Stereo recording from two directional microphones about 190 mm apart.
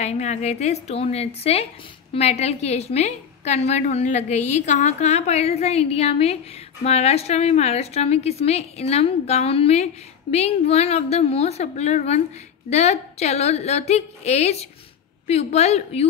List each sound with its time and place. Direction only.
0.0 s a woman's voice: 35° left (ahead or behind)